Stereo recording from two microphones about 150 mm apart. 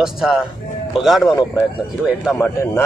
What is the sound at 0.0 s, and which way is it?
Speech, 5° right (ahead or behind).